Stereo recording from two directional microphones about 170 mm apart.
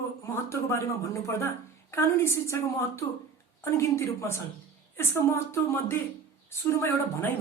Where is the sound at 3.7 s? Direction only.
15° left (ahead or behind).